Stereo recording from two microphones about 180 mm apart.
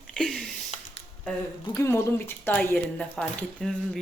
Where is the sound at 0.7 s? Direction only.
40° left (ahead or behind).